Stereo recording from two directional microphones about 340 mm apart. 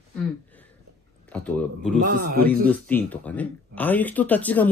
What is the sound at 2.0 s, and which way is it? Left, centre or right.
Speech, right.